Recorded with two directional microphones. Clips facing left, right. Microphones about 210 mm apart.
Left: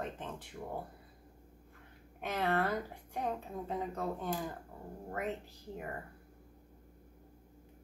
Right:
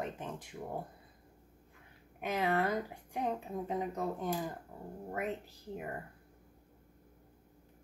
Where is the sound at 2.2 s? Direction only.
10° right (ahead or behind).